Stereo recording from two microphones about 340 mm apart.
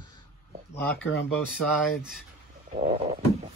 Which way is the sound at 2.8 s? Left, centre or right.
Centre.